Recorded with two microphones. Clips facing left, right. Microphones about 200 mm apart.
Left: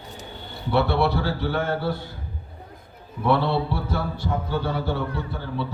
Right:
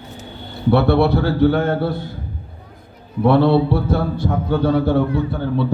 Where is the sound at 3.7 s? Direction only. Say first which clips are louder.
Right 8 dB; 55° right (ahead or behind).